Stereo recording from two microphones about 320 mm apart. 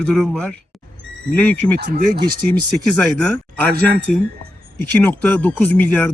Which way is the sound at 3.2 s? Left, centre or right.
Centre.